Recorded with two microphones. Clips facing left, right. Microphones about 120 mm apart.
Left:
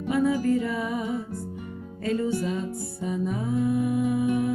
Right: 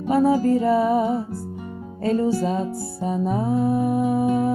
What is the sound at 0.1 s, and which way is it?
Music, 35° right (ahead or behind).